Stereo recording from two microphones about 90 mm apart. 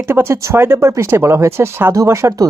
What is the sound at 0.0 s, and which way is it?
Speech, 25° right (ahead or behind).